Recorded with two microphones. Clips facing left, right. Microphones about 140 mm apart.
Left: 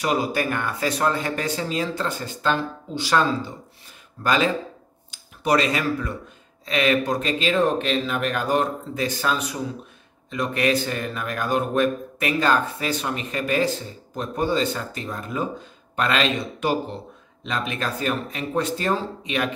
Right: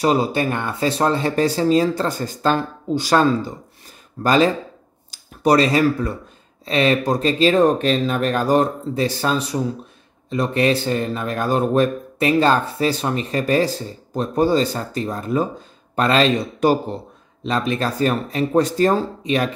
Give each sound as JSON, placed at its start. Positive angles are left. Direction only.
{"t": 0.0, "sound": "speech", "side_deg": -30}